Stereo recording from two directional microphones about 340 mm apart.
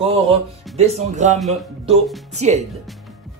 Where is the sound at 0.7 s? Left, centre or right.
Centre.